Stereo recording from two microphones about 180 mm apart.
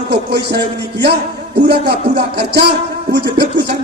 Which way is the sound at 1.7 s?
65° right (ahead or behind).